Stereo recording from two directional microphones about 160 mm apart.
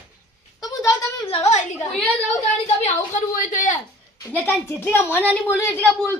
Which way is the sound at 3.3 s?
55° left (ahead or behind).